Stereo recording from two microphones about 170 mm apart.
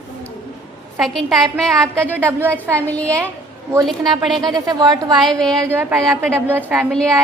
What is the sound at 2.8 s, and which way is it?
A woman's voice, 10° left (ahead or behind).